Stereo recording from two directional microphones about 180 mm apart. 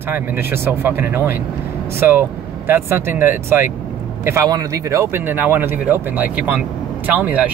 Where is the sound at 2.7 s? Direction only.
10° right (ahead or behind).